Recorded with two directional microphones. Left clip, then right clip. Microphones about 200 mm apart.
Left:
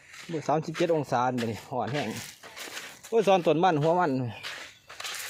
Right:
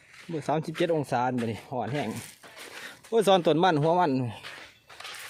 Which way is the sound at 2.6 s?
55° left (ahead or behind).